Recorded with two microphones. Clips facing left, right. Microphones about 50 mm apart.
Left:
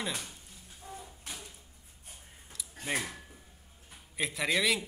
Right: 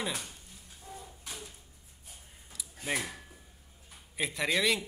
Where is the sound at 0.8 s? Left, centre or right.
Left.